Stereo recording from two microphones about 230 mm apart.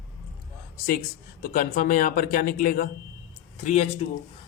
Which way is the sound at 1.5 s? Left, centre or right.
Left.